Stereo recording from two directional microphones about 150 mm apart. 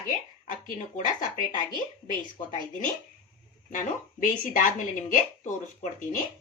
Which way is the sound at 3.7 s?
60° left (ahead or behind).